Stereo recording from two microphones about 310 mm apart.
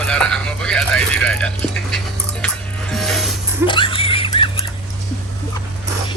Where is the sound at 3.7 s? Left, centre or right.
Centre.